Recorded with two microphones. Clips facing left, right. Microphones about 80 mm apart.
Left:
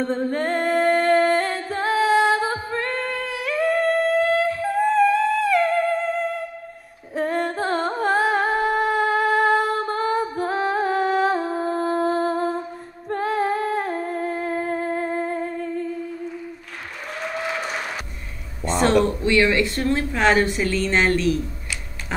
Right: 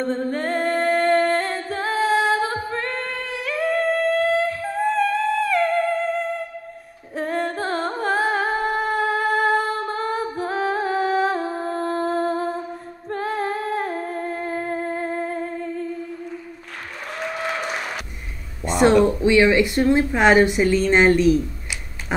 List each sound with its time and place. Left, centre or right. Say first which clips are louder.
0.0 s music: left 1 dB; centre
13.1 s humming: left 3 dB; centre
17.5 s applause: right 1 dB; centre
18.6 s a sound: right 3 dB; centre
19.2 s a woman's voice: right 3 dB; centre